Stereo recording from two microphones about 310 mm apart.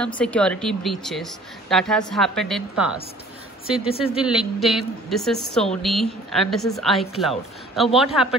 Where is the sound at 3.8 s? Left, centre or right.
Centre.